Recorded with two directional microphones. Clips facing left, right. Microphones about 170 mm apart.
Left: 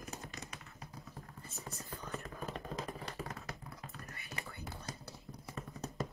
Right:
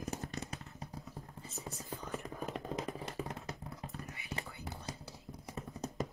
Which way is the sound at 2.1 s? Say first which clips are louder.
Right 2 dB; 15° right (ahead or behind).